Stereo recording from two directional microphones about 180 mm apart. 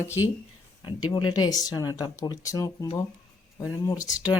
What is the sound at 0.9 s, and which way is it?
Speech, 25° left (ahead or behind).